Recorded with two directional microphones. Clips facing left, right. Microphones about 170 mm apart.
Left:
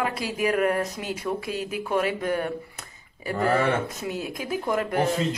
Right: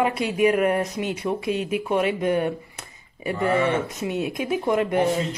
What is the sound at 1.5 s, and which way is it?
Speech, 35° left (ahead or behind).